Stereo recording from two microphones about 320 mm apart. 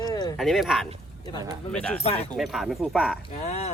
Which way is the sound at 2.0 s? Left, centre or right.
Centre.